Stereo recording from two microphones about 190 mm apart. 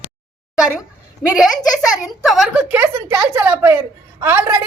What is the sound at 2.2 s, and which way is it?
A woman's voice, centre (ahead or behind).